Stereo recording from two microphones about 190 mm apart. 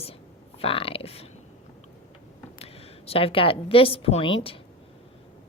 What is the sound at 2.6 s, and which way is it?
A woman's voice, 30° left (ahead or behind).